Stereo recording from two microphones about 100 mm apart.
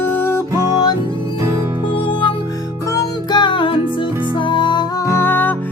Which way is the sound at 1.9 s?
60° left (ahead or behind).